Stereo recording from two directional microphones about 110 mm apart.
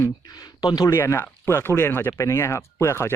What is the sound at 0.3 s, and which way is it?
Speech, 35° left (ahead or behind).